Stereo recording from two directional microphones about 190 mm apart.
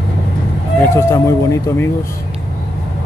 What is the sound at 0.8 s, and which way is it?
Speech, 15° left (ahead or behind).